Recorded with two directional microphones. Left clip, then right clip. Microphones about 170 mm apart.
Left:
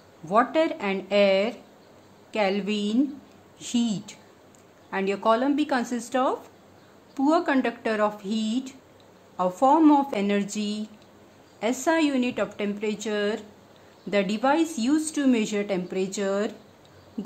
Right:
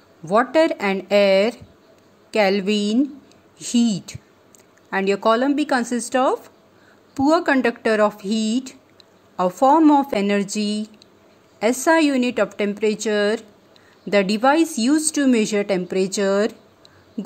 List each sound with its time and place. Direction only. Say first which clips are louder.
0.2 s a woman's voice: right 5 dB; 30° right (ahead or behind)